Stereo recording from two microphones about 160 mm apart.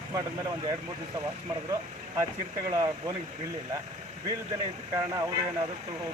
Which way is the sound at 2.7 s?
20° right (ahead or behind).